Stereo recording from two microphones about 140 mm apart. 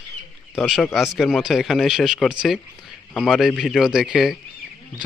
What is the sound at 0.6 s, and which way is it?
Speech, centre (ahead or behind).